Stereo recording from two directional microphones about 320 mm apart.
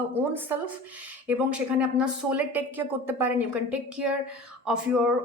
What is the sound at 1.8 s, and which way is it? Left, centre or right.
A woman's voice, centre.